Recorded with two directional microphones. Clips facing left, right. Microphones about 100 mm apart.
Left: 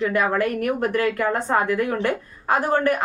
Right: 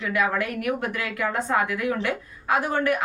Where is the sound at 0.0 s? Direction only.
40° left (ahead or behind).